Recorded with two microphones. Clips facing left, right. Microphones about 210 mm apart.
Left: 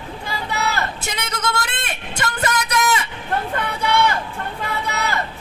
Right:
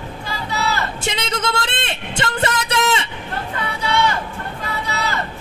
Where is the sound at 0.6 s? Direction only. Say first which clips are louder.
Right 3 dB; 25° right (ahead or behind).